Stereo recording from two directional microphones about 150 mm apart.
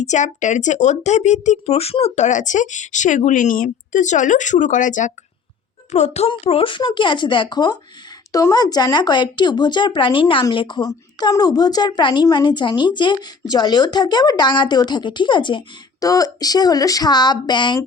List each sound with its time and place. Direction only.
0.0 s speech: 50° left (ahead or behind)
5.9 s a woman's voice: 45° left (ahead or behind); by 17.7 s 30° left (ahead or behind)